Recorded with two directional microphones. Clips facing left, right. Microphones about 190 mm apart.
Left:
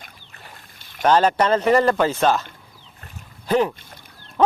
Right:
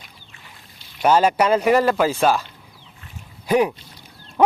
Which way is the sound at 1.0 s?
10° right (ahead or behind).